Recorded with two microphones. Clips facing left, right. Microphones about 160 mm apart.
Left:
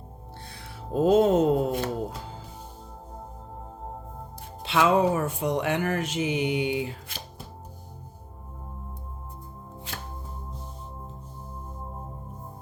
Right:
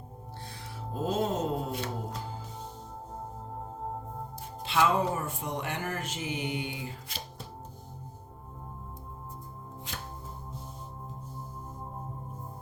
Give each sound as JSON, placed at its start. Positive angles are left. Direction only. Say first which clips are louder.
{"t": 0.9, "sound": "mantra", "louder": "left 10 dB", "side_deg": 70}
{"t": 4.6, "sound": "speech", "louder": "left 5 dB", "side_deg": 90}